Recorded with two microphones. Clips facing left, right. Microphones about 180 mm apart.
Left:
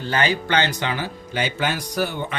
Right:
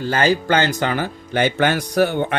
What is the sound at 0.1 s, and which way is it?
Speech, 45° right (ahead or behind).